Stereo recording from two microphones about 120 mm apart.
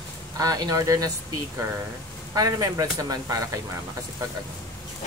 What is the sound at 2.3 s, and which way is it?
Speech, 30° right (ahead or behind).